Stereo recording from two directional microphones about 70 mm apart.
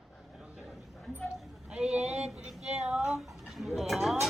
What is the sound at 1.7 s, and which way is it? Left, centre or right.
Female singing, centre.